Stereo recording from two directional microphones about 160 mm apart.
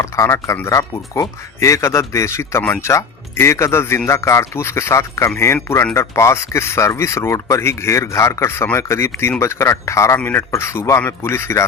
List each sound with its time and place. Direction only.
0.0 s speech: 20° left (ahead or behind)